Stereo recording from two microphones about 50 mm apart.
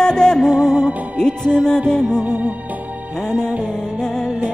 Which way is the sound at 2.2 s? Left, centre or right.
Right.